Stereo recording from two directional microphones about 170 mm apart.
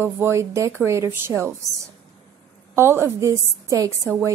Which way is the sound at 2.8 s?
15° right (ahead or behind).